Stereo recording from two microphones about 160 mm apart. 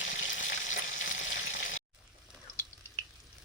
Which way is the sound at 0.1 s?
55° left (ahead or behind).